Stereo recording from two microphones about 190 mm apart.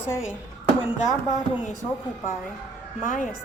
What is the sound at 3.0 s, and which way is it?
Speech, 40° left (ahead or behind).